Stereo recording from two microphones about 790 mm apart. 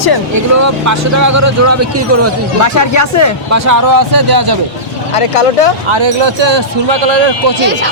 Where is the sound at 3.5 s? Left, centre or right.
Right.